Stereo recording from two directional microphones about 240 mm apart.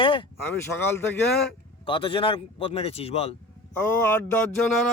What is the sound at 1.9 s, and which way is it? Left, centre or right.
Speech, left.